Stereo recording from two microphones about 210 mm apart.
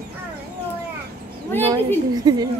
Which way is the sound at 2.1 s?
20° right (ahead or behind).